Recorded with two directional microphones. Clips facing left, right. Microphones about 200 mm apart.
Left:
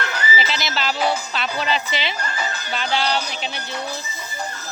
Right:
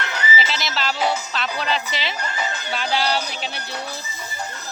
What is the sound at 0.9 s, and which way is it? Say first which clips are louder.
Speech: left 1 dB; 20° right (ahead or behind).